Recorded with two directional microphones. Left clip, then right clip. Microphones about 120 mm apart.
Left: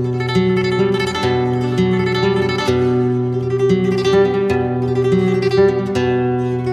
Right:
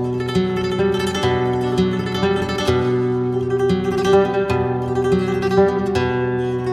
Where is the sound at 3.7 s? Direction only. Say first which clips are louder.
Left 1 dB; 15° right (ahead or behind).